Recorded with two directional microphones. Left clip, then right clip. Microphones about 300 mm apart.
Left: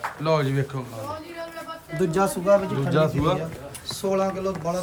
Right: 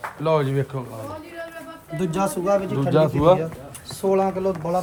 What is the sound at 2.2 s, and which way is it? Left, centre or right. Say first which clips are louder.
Speech: left 1 dB; right.